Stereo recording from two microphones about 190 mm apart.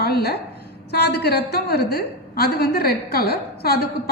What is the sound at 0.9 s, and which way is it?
A woman's voice, 60° left (ahead or behind).